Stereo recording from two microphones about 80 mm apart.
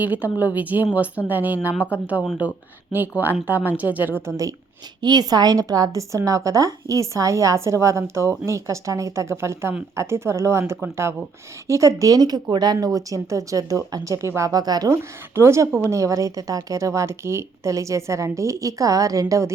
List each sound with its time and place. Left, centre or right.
0.0 s a woman's voice: right
4.9 s a woman's voice: right
9.3 s a woman's voice: right
14.5 s a woman's voice: right
15.4 s a woman's voice: right